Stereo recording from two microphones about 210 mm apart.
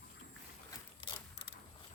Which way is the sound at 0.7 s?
20° left (ahead or behind).